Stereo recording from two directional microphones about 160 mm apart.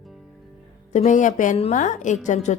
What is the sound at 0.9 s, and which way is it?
Music, 50° left (ahead or behind).